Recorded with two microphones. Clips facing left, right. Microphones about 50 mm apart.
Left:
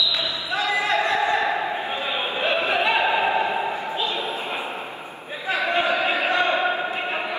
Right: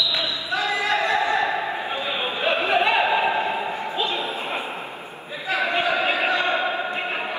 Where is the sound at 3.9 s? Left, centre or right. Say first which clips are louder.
Right 1 dB; right.